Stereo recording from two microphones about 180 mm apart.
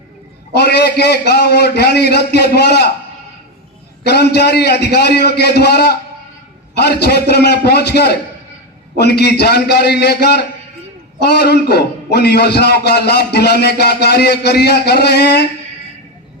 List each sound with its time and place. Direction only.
0.6 s a man's voice: 65° left (ahead or behind)
4.0 s a man's voice: 65° left (ahead or behind)